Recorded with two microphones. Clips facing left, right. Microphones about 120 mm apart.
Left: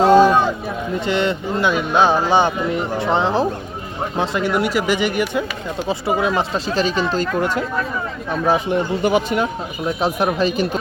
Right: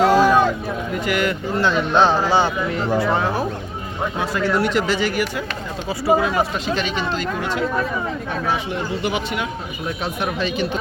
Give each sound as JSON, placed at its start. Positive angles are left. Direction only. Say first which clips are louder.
{"t": 0.0, "sound": "a sound", "louder": "left 3 dB", "side_deg": 25}
{"t": 0.9, "sound": "speech", "louder": "left 2 dB", "side_deg": 25}
{"t": 1.6, "sound": "speech", "louder": "even", "side_deg": 10}
{"t": 6.7, "sound": "speech", "louder": "left 8 dB", "side_deg": 40}